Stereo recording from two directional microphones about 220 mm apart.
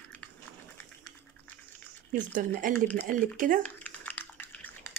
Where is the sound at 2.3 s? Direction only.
40° right (ahead or behind).